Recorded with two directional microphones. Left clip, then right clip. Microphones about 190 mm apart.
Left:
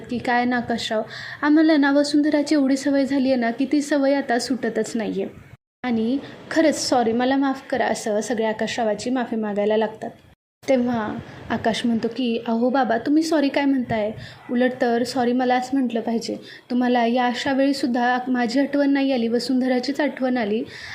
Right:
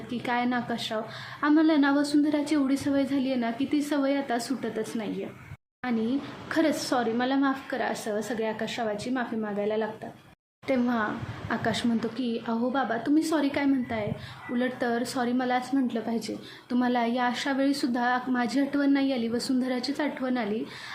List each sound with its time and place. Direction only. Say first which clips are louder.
0.1 s a woman's voice: left 7 dB; 25° left (ahead or behind)
10.7 s a woman's voice: left 6 dB; 20° left (ahead or behind)